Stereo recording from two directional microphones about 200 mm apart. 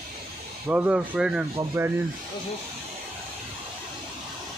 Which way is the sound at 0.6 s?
10° right (ahead or behind).